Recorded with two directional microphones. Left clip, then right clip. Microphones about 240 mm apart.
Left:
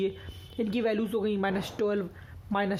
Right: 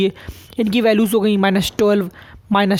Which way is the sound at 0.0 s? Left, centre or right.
Right.